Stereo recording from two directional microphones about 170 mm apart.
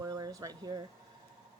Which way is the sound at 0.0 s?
20° right (ahead or behind).